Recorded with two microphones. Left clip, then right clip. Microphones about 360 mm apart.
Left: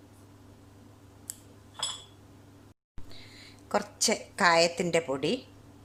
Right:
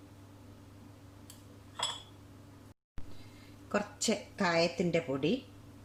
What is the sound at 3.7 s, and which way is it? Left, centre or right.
A woman's voice, centre.